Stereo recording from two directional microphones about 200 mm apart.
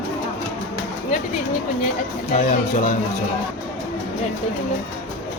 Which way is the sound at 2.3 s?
40° left (ahead or behind).